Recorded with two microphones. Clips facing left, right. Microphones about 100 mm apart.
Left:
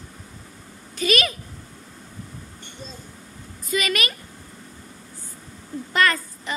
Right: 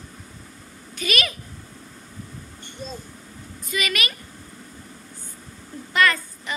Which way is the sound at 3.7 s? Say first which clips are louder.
Left 3 dB; 35° left (ahead or behind).